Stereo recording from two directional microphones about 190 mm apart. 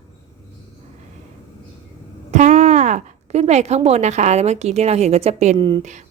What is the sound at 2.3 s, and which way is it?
Speech, 35° right (ahead or behind).